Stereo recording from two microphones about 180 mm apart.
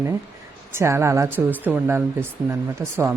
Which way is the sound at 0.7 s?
15° right (ahead or behind).